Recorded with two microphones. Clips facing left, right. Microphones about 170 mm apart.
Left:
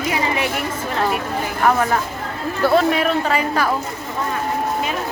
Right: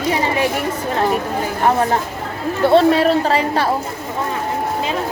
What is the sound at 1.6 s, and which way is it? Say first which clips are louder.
Speech: right 1 dB; 25° right (ahead or behind).